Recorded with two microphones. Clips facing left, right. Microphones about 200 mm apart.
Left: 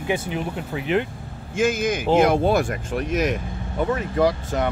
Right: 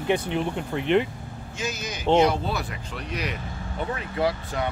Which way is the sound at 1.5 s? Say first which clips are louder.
Left 12 dB; 50° left (ahead or behind).